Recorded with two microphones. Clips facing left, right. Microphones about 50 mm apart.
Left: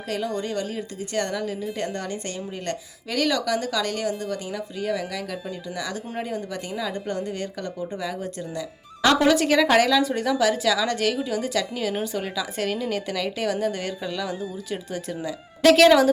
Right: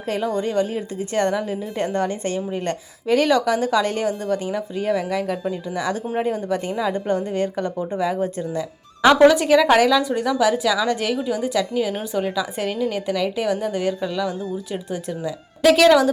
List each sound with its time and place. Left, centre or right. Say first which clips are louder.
0.1 s a woman's voice: right 5 dB; right
9.1 s a woman's voice: right 5 dB; centre